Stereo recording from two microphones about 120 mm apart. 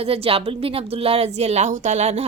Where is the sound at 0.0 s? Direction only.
55° right (ahead or behind).